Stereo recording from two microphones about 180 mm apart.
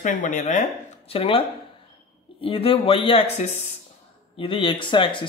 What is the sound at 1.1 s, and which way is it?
Speech, 30° left (ahead or behind).